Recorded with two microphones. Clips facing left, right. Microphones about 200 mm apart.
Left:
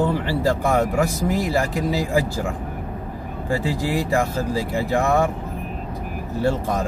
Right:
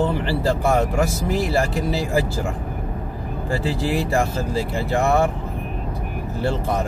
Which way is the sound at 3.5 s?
15° left (ahead or behind).